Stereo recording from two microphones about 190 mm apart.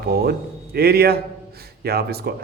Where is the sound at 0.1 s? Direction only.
55° right (ahead or behind).